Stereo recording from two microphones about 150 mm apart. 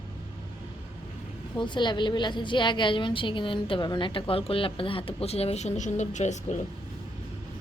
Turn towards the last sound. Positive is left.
turn(degrees=50)  # may be behind; listen again after turning